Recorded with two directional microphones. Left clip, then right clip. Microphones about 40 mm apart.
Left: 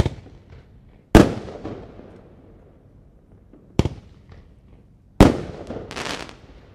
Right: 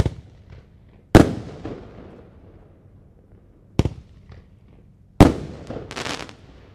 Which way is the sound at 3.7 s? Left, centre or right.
Right.